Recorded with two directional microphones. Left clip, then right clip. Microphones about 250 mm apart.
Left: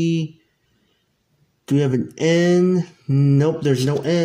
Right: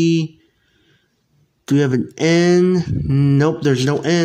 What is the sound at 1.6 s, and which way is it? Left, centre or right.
Speech, centre.